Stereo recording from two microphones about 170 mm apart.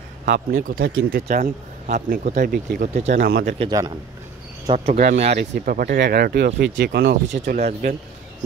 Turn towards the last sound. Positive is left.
turn(degrees=-40)  # may be behind; listen again after turning